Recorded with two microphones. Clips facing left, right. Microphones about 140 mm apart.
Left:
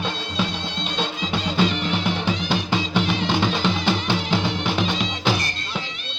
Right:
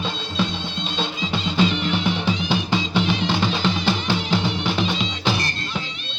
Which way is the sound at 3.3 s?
10° left (ahead or behind).